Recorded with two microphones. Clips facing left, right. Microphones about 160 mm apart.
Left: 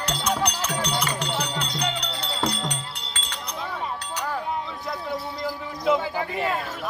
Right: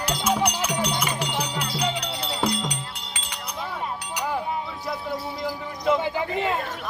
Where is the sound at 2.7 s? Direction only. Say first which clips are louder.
Even; 10° right (ahead or behind).